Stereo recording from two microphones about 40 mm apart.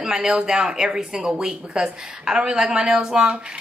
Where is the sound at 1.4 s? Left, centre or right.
Centre.